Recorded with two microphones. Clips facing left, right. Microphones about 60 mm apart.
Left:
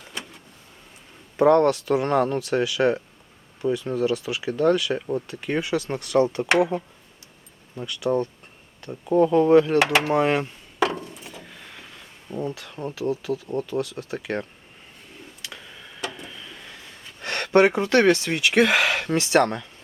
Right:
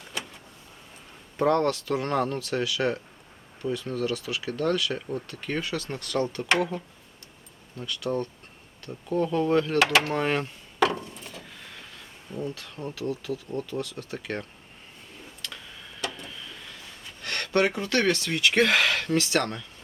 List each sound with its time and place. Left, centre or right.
1.4 s speech: centre
8.8 s a sound: left
12.3 s speech: centre
12.9 s speech: left
13.7 s speech: centre
15.4 s a sound: centre
17.2 s speech: left
18.4 s speech: centre; by 19.6 s left